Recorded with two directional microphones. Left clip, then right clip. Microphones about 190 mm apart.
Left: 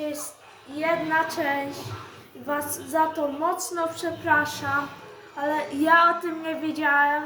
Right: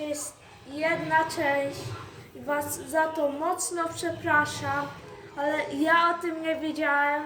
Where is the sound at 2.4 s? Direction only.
15° right (ahead or behind).